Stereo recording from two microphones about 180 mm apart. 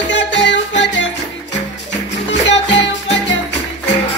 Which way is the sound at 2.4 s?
85° left.